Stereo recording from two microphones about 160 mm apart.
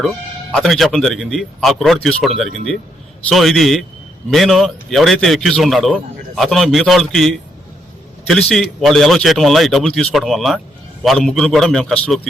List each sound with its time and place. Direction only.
0.5 s a man's voice: centre (ahead or behind)